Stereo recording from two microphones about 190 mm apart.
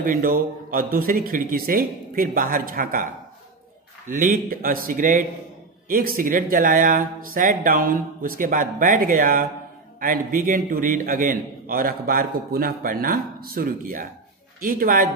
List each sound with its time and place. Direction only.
0.0 s a man's voice: 50° right (ahead or behind)
4.1 s a man's voice: 45° right (ahead or behind)